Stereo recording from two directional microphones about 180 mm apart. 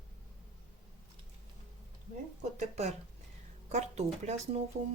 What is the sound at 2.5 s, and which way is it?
A woman's voice, 40° right (ahead or behind).